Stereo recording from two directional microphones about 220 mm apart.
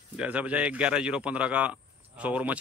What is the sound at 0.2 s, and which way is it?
Speech, 5° right (ahead or behind).